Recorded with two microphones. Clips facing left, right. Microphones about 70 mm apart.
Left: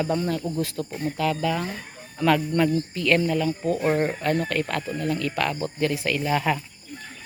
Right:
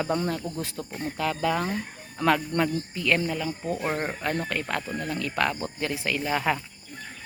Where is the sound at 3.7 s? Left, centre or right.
Centre.